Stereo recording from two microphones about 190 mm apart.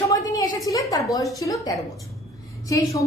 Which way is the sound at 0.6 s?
20° left (ahead or behind).